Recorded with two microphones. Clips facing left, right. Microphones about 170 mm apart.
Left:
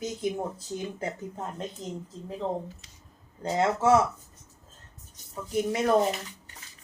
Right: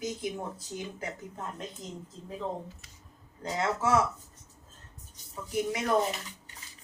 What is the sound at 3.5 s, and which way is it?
Speech, 30° left (ahead or behind).